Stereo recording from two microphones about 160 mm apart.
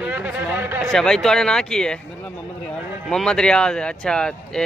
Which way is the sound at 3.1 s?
5° left (ahead or behind).